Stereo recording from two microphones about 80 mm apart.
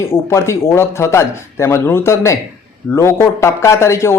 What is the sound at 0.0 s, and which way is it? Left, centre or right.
A man's voice, left.